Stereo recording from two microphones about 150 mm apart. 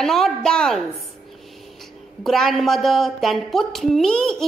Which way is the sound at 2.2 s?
Centre (ahead or behind).